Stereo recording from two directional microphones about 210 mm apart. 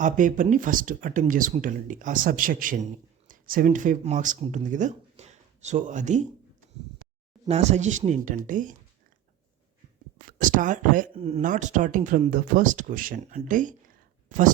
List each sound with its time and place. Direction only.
0.0 s speech: 40° right (ahead or behind)
7.4 s speech: 30° right (ahead or behind)
10.2 s speech: 40° right (ahead or behind)
11.1 s speech: 30° right (ahead or behind)